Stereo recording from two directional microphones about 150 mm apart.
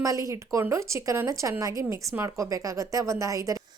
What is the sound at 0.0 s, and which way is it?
A woman's voice, 20° right (ahead or behind).